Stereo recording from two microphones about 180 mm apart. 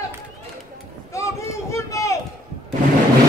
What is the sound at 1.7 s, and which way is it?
Run, 15° left (ahead or behind).